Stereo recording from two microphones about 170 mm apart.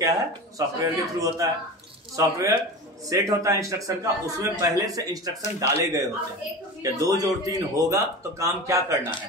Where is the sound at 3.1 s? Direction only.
20° right (ahead or behind).